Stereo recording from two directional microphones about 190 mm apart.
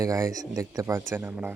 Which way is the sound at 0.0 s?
15° right (ahead or behind).